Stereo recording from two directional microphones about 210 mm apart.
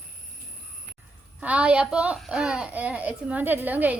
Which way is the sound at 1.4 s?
5° right (ahead or behind).